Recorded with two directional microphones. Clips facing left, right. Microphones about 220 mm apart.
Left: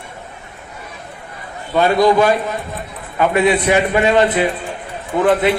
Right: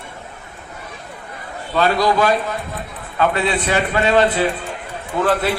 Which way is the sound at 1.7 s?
20° left (ahead or behind).